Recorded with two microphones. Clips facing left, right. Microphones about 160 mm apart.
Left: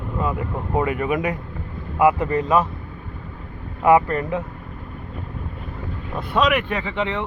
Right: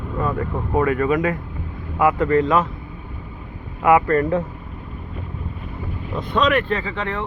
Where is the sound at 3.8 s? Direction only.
20° left (ahead or behind).